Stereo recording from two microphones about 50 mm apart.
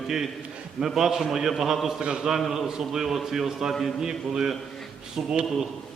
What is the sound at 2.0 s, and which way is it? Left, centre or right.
Speech, centre.